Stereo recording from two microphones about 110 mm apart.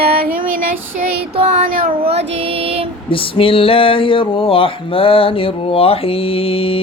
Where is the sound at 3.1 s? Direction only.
55° left (ahead or behind).